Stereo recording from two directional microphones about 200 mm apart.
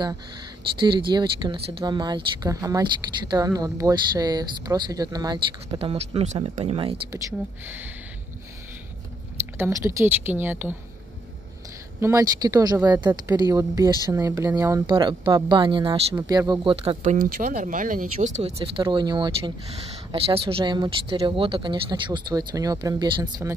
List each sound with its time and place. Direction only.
0.7 s speech: 25° right (ahead or behind)
5.8 s speech: 30° right (ahead or behind); by 7.9 s 10° right (ahead or behind)
9.6 s speech: 15° right (ahead or behind)
12.0 s speech: 15° right (ahead or behind)
17.0 s speech: 45° right (ahead or behind); by 23.5 s 20° right (ahead or behind)